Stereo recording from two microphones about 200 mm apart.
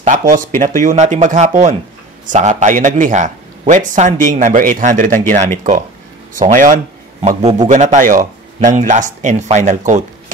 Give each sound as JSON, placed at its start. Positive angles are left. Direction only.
{"t": 0.3, "sound": "a man's voice", "side_deg": -40}